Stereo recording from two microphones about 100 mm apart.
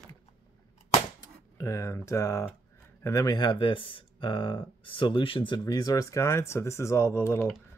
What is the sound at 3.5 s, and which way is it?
Speech, 60° left (ahead or behind).